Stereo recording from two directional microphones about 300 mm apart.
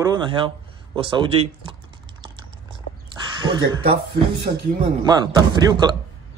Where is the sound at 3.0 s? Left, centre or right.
Centre.